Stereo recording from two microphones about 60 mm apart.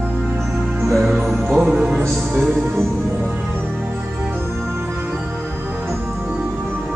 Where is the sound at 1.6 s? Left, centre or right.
Centre.